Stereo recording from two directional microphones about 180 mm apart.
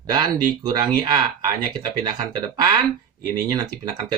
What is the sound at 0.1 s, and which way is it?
Speech, 25° right (ahead or behind).